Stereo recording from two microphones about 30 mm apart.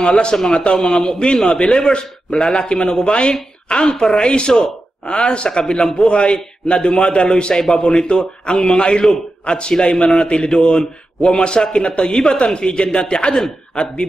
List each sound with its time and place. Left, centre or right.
0.1 s a man's voice: left
1.7 s a man's voice: centre
2.0 s a man's voice: left
7.5 s a man's voice: left
7.8 s a man's voice: left
12.1 s a woman's voice: centre
12.4 s a man's voice: left